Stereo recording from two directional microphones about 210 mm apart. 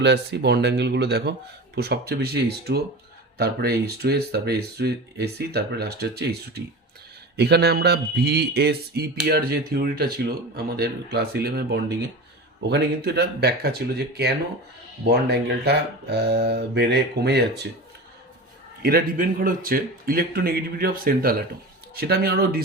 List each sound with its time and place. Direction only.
0.0 s speech: 55° right (ahead or behind)
18.8 s speech: 45° right (ahead or behind)